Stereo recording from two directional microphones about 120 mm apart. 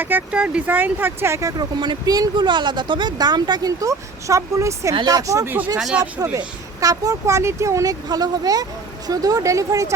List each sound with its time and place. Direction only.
0.0 s speech: 15° right (ahead or behind)
5.5 s speech: 15° right (ahead or behind)
6.3 s speech: 30° right (ahead or behind)